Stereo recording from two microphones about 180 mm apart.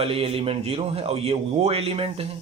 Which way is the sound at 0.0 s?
30° right (ahead or behind).